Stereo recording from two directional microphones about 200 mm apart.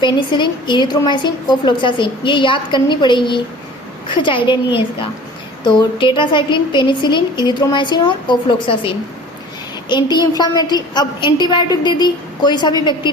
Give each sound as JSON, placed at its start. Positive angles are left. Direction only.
{"t": 0.0, "sound": "a woman's voice", "side_deg": 25}